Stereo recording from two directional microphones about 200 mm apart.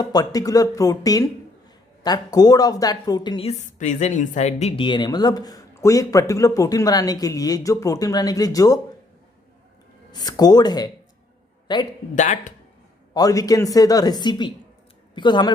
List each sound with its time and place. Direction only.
0.0 s speech: 20° left (ahead or behind)
3.7 s speech: 40° left (ahead or behind); by 8.8 s 20° left (ahead or behind)
10.1 s speech: 20° left (ahead or behind)
12.1 s speech: 40° left (ahead or behind)
13.1 s speech: 20° left (ahead or behind)